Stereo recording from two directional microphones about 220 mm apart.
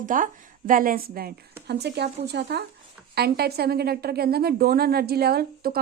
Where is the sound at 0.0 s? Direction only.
35° right (ahead or behind).